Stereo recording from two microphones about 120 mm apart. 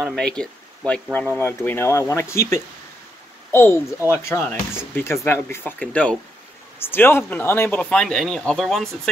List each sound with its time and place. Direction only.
0.0 s speech: 5° left (ahead or behind)